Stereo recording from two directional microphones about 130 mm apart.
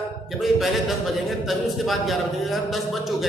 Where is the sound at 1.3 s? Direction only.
Centre (ahead or behind).